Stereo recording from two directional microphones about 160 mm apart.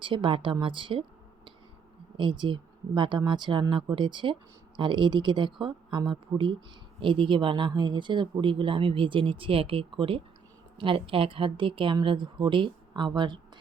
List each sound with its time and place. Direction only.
0.0 s speech: 30° right (ahead or behind)
2.1 s speech: 30° right (ahead or behind)